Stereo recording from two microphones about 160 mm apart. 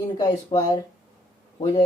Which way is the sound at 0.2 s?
25° left (ahead or behind).